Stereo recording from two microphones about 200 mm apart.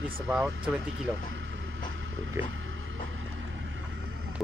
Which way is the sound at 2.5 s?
80° right.